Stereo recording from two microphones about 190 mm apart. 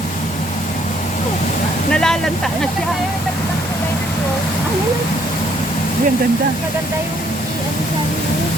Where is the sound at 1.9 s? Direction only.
5° left (ahead or behind).